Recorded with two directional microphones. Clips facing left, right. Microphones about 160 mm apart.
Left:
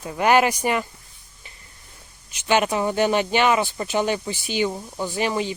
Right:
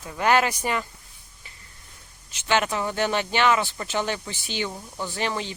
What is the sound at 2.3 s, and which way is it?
Speech, 15° left (ahead or behind).